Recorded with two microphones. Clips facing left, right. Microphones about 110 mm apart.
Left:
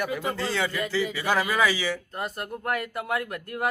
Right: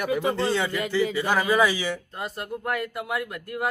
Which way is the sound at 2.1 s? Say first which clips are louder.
Even; centre (ahead or behind).